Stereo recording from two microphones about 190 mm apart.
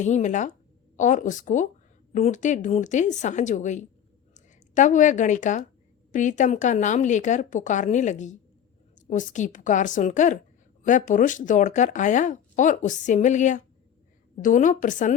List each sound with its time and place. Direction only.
0.0 s a woman's voice: 40° left (ahead or behind)